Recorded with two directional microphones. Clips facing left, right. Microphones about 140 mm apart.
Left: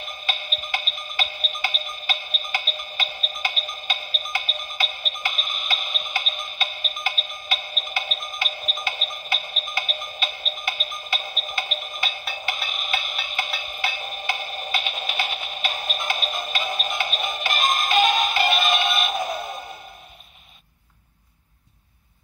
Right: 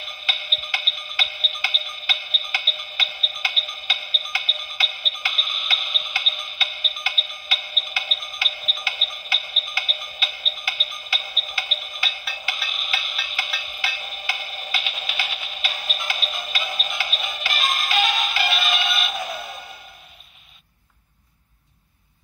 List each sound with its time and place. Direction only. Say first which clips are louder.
0.0 s music: left 3 dB; 45° left (ahead or behind)